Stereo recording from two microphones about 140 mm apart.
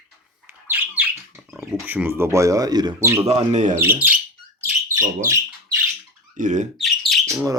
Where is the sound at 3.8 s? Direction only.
15° right (ahead or behind).